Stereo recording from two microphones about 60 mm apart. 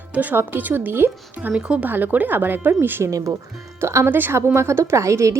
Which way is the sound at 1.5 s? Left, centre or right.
Centre.